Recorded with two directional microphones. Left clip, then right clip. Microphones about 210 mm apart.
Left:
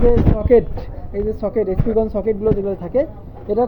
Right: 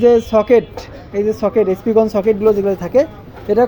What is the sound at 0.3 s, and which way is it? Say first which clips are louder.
Speech: right 12 dB; 55° right (ahead or behind).